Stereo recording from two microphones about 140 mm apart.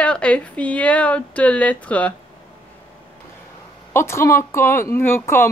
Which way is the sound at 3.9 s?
20° left (ahead or behind).